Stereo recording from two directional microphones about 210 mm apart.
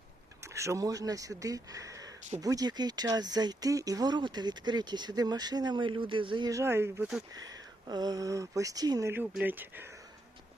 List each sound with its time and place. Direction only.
0.4 s speech: 15° right (ahead or behind)
7.3 s speech: 20° right (ahead or behind)